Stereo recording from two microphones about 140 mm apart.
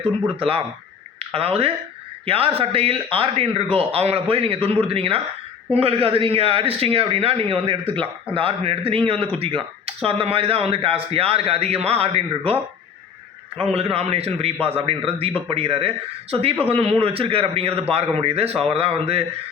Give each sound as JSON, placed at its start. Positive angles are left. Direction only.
{"t": 0.3, "sound": "a man's voice", "side_deg": -45}
{"t": 13.7, "sound": "a man's voice", "side_deg": -45}